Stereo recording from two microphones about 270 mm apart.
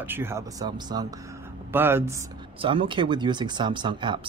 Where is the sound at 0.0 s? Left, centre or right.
Centre.